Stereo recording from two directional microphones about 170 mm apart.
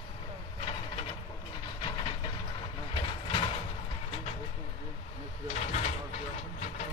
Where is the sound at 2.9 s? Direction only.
30° left (ahead or behind).